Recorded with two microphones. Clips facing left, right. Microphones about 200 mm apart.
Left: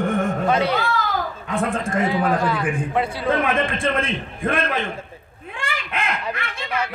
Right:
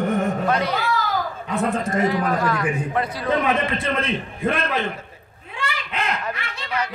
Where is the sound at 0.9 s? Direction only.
50° left (ahead or behind).